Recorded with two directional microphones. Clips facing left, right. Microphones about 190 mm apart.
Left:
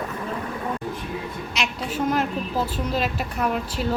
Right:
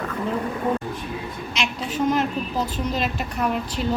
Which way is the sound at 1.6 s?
5° left (ahead or behind).